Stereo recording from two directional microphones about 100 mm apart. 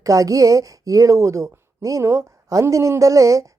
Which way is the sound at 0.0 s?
35° right (ahead or behind).